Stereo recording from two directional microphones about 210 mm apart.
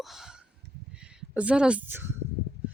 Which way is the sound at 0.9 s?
5° right (ahead or behind).